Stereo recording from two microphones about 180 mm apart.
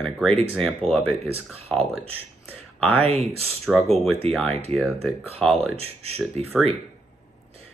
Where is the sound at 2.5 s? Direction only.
10° left (ahead or behind).